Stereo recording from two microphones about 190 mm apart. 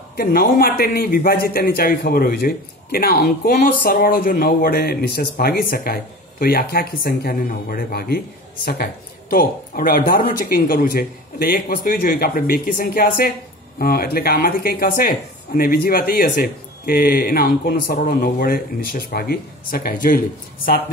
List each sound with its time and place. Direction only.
0.1 s speech: 50° left (ahead or behind)